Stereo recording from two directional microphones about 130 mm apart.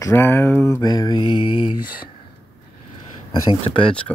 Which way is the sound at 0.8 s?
35° left (ahead or behind).